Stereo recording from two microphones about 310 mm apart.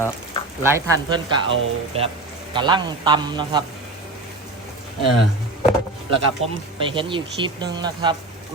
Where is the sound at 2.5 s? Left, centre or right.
Centre.